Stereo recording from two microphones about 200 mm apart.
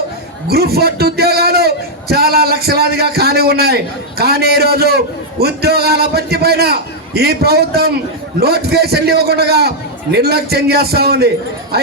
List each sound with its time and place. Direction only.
0.4 s a man's voice: 50° right (ahead or behind)